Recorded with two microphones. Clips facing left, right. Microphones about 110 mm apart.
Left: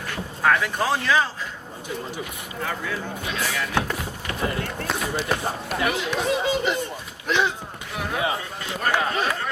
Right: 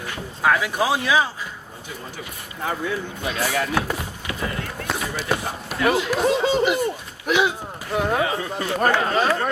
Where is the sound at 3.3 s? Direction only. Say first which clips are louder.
Right 5 dB; 35° right (ahead or behind).